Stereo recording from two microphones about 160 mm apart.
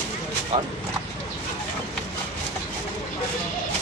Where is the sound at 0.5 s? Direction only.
45° right (ahead or behind).